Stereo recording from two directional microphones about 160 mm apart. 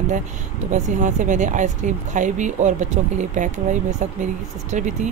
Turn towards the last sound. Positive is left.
turn(degrees=-50)  # may be behind; listen again after turning